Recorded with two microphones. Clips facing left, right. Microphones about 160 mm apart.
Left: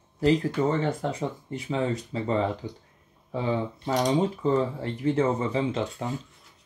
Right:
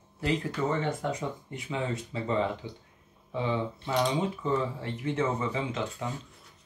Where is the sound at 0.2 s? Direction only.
35° left (ahead or behind).